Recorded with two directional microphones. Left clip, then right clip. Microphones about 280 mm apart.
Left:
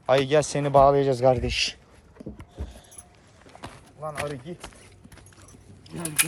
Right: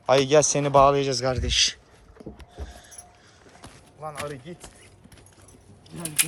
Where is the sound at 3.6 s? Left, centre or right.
Centre.